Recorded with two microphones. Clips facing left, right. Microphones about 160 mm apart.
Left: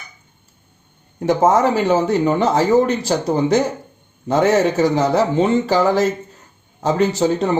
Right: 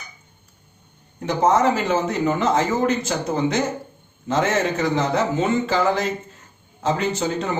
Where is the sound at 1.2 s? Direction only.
40° left (ahead or behind).